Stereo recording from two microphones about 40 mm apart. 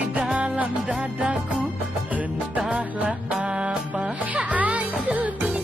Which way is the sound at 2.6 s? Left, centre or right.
Centre.